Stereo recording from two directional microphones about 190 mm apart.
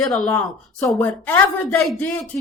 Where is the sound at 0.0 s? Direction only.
Centre (ahead or behind).